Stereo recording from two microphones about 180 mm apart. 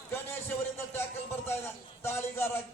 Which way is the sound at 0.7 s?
10° left (ahead or behind).